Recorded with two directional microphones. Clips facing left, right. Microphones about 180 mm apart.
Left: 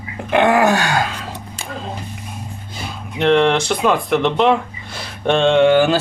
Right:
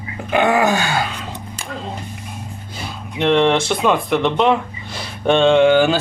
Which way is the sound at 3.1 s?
Centre (ahead or behind).